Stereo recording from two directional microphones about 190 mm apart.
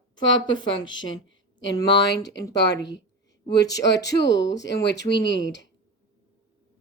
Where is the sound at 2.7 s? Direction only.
65° left (ahead or behind).